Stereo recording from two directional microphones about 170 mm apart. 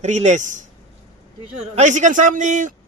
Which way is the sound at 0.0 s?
45° right (ahead or behind).